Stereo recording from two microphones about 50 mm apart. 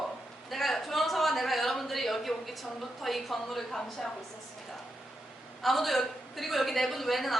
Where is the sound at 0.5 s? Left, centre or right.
Centre.